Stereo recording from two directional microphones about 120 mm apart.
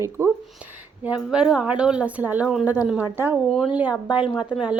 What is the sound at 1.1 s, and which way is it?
A woman's voice, 10° right (ahead or behind).